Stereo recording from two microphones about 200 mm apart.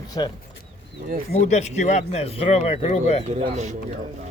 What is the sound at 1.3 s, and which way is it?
Speech, 35° left (ahead or behind).